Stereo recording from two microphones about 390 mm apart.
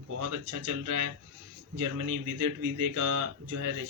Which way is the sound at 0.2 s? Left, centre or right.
Right.